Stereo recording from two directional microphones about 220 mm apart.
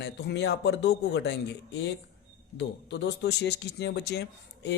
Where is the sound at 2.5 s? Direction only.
50° left (ahead or behind).